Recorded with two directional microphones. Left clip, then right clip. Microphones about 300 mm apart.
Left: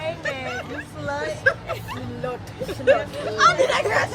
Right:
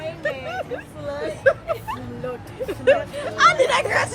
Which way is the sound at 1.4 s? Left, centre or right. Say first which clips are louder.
Right 5 dB; centre.